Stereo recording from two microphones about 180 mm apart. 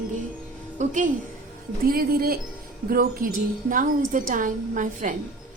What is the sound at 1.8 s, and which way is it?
A woman's voice, 55° right (ahead or behind).